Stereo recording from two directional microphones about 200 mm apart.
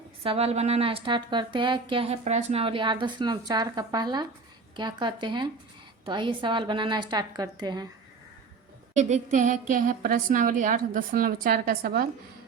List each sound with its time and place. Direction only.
0.2 s speech: 30° right (ahead or behind)
9.0 s a woman's voice: 35° right (ahead or behind)